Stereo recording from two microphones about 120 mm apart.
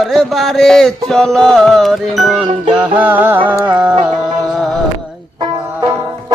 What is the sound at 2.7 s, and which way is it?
Music, 10° right (ahead or behind).